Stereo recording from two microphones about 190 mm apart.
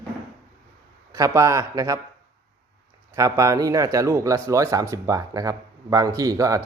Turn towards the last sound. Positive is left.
turn(degrees=-15)  # may be behind; listen again after turning